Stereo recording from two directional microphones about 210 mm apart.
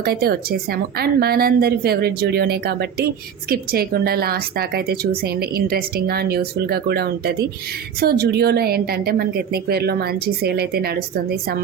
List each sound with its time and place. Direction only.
0.0 s a woman's voice: 45° right (ahead or behind)